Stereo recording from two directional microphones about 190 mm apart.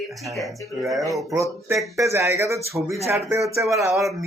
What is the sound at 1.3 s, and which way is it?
Speech, 15° right (ahead or behind).